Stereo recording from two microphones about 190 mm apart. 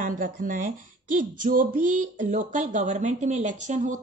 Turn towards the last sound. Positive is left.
turn(degrees=-40)  # may be behind; listen again after turning